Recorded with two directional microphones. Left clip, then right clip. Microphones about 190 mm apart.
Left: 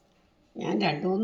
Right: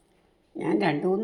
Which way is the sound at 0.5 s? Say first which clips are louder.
Right 3 dB; 25° right (ahead or behind).